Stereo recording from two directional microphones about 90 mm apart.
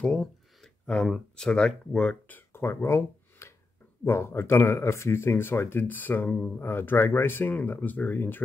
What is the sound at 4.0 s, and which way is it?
Speech, 25° left (ahead or behind).